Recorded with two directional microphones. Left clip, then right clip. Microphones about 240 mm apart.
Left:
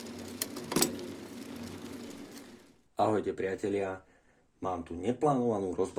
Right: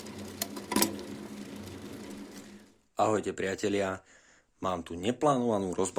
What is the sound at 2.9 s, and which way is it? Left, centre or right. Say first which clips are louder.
Speech: right 1 dB; right.